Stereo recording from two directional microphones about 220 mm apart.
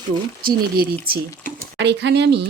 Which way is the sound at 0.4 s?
40° right (ahead or behind).